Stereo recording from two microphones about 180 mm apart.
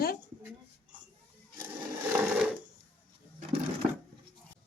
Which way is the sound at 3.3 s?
30° right (ahead or behind).